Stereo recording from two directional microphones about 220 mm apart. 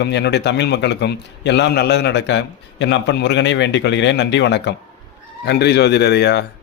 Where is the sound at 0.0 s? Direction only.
50° left (ahead or behind).